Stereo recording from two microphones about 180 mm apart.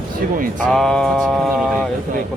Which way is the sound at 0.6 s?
5° left (ahead or behind).